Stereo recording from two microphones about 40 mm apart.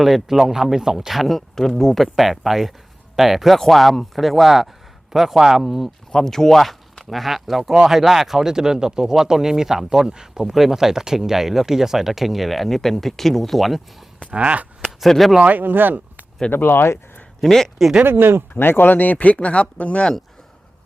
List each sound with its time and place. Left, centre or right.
0.0 s speech: centre
2.1 s speech: centre
6.1 s speech: centre
14.3 s speech: right
14.8 s a sound: centre
15.4 s speech: right
16.5 s speech: left
17.4 s speech: centre
18.0 s speech: right
18.5 s speech: left